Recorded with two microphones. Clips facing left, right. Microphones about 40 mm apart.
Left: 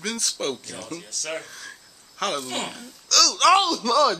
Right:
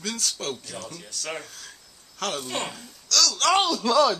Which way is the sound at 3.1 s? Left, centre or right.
Left.